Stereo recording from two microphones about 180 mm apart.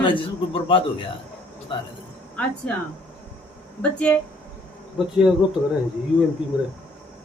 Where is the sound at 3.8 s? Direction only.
5° left (ahead or behind).